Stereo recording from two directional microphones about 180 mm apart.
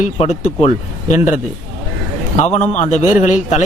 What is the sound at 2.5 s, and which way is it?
Speech, 40° left (ahead or behind).